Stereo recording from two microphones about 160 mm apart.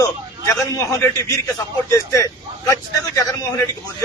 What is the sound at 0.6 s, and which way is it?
A man's voice, 20° left (ahead or behind).